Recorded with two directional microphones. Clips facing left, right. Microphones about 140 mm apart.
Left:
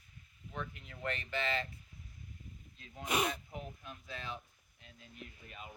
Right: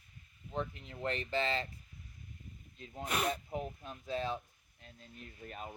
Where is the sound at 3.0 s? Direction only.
10° left (ahead or behind).